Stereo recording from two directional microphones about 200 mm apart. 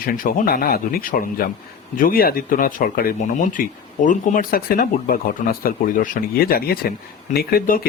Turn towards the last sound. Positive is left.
turn(degrees=45)  # may be behind; listen again after turning